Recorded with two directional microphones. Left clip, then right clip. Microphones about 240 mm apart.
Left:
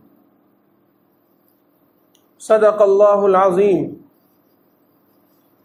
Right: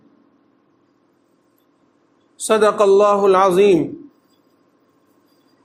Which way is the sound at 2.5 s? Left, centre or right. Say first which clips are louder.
Left 1 dB; right.